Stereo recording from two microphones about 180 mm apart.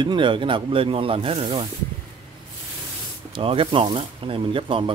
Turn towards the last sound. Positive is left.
turn(degrees=-30)  # may be behind; listen again after turning